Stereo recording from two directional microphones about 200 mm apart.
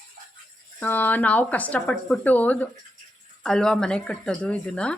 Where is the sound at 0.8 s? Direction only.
10° left (ahead or behind).